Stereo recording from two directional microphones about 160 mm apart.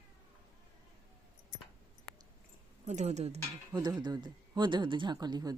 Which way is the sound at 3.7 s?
25° right (ahead or behind).